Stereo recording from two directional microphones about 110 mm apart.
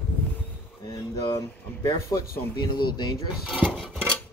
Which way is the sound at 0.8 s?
30° left (ahead or behind).